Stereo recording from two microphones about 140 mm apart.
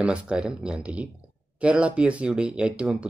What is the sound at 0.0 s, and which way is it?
Speech, 5° right (ahead or behind).